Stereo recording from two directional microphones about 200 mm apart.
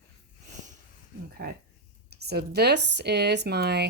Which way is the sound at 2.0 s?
55° right (ahead or behind).